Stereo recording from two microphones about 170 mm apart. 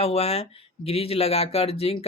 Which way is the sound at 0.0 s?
35° left (ahead or behind).